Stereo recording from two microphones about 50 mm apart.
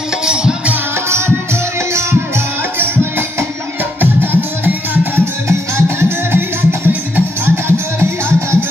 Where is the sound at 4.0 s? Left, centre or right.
Right.